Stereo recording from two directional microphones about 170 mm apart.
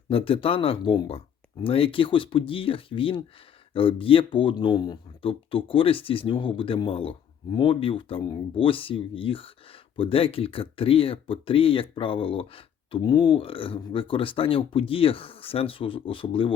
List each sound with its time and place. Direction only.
0.1 s speech: 35° left (ahead or behind)